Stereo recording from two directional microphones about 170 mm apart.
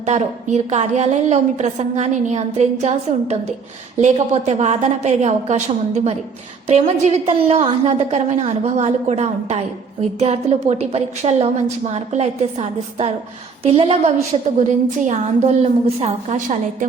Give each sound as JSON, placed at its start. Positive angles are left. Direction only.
{"t": 0.0, "sound": "a woman's voice", "side_deg": -40}
{"t": 14.7, "sound": "a woman's voice", "side_deg": -45}